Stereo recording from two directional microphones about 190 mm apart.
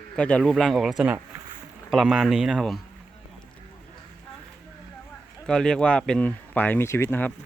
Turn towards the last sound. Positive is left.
turn(degrees=10)  # may be behind; listen again after turning